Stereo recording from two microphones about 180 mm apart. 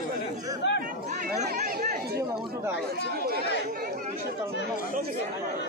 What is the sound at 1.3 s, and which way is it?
Chatter, 40° right (ahead or behind).